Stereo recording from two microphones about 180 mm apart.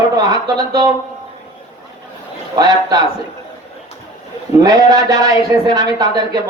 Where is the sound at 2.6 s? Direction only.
20° right (ahead or behind).